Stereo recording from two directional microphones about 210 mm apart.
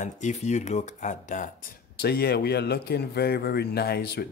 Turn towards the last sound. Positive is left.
turn(degrees=50)  # may be behind; listen again after turning